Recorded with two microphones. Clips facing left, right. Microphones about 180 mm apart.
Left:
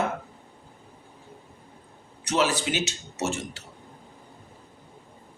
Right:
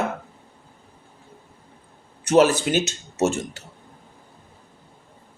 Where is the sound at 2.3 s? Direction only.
50° right (ahead or behind).